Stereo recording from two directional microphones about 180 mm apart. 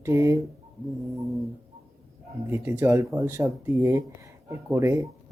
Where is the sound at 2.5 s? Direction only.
15° right (ahead or behind).